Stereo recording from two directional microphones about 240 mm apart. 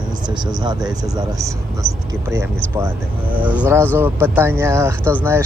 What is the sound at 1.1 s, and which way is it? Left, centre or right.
Speech, centre.